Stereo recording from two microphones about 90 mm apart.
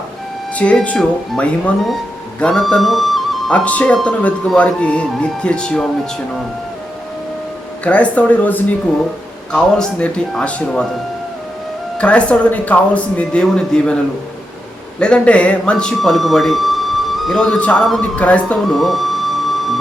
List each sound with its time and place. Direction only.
0.5 s speech: 15° left (ahead or behind)
3.5 s speech: 15° left (ahead or behind)
7.9 s speech: 15° left (ahead or behind)
9.5 s speech: 5° left (ahead or behind)
11.9 s speech: 15° left (ahead or behind)
14.9 s a man's voice: 10° left (ahead or behind)
18.7 s music: centre (ahead or behind)